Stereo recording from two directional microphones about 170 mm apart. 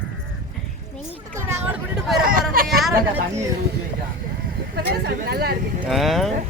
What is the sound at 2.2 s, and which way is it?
Speech, 55° right (ahead or behind).